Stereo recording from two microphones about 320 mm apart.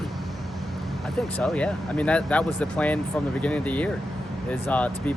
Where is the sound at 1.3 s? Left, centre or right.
Centre.